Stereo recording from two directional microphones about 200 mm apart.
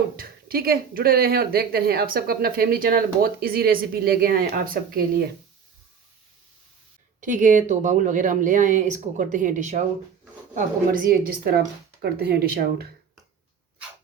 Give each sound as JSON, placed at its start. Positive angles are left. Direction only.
{"t": 0.2, "sound": "speech", "side_deg": -50}
{"t": 7.2, "sound": "speech", "side_deg": -40}